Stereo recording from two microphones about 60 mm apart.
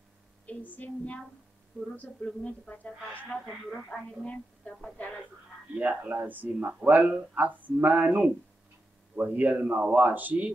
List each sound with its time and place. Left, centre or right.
0.5 s speech: left
3.4 s speech: centre
4.2 s speech: centre
5.8 s a man's voice: right